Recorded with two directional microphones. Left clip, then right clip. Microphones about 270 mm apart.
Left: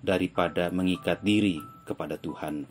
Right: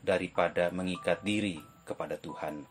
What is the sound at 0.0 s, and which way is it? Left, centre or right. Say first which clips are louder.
Speech: left 2 dB; centre.